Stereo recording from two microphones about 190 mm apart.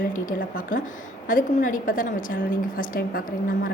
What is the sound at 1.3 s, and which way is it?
A woman's voice, 45° left (ahead or behind).